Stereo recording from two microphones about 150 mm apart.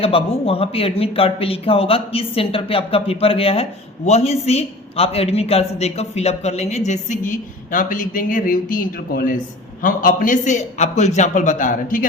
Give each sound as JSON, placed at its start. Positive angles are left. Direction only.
{"t": 0.0, "sound": "a man's voice", "side_deg": 40}